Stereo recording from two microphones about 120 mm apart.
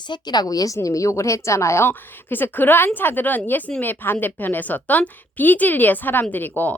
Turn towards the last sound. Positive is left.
turn(degrees=15)  # may be behind; listen again after turning